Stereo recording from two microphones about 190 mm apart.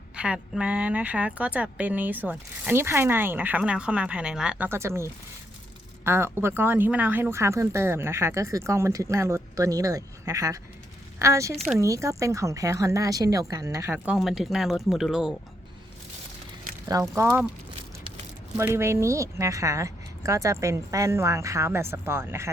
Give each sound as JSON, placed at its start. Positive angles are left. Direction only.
{"t": 0.2, "sound": "speech", "side_deg": -5}
{"t": 16.9, "sound": "speech", "side_deg": -15}
{"t": 18.5, "sound": "speech", "side_deg": -10}